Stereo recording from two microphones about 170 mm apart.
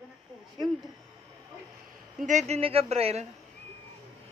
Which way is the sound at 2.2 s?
45° right (ahead or behind).